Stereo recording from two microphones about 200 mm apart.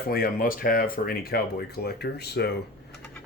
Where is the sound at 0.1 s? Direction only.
45° left (ahead or behind).